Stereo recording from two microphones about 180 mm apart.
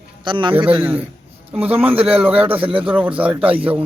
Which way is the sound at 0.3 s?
25° right (ahead or behind).